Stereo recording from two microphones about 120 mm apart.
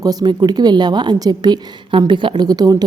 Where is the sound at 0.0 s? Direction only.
35° right (ahead or behind).